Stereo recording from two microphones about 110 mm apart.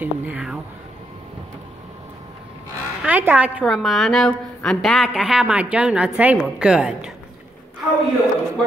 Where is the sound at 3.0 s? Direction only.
15° right (ahead or behind).